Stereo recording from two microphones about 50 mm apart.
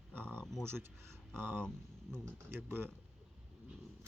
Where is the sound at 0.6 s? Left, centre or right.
Right.